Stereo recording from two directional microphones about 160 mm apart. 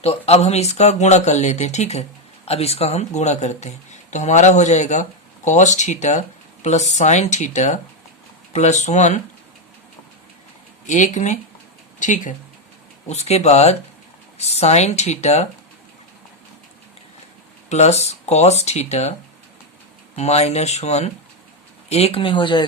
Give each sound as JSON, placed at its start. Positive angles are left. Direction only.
{"t": 0.0, "sound": "speech", "side_deg": 40}
{"t": 10.8, "sound": "speech", "side_deg": 50}
{"t": 17.7, "sound": "speech", "side_deg": 45}
{"t": 20.1, "sound": "speech", "side_deg": 40}